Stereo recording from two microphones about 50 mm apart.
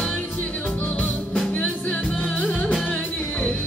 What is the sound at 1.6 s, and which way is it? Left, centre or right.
Music, left.